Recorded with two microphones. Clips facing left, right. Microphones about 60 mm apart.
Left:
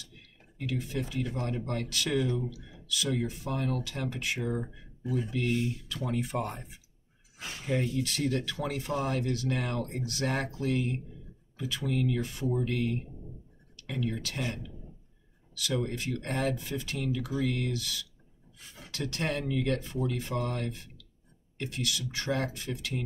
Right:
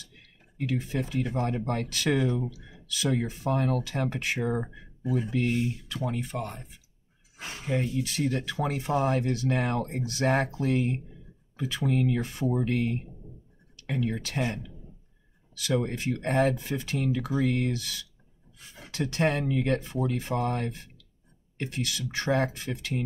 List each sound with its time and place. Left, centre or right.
0.7 s speech: right
3.3 s speech: right
3.8 s speech: right
6.0 s speech: centre
7.3 s speech: right
14.1 s speech: right
15.6 s speech: right